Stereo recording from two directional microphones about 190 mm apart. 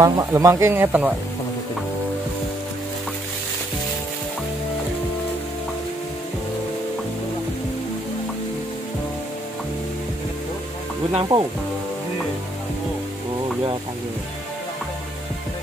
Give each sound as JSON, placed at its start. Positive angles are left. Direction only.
{"t": 0.0, "sound": "speech", "side_deg": -15}
{"t": 11.1, "sound": "speech", "side_deg": -25}